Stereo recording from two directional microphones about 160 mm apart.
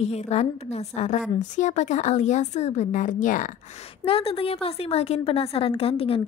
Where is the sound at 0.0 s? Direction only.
45° left (ahead or behind).